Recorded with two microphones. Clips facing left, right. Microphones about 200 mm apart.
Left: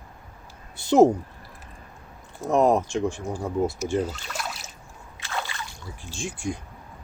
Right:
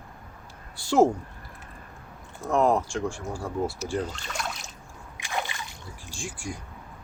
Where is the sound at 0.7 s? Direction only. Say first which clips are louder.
Left 4 dB; 20° left (ahead or behind).